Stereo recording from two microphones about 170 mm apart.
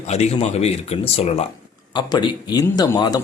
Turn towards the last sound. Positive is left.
turn(degrees=25)  # may be behind; listen again after turning